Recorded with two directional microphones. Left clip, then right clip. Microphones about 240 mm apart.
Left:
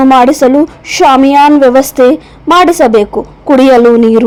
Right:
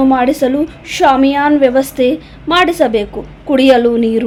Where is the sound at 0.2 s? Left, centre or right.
Left.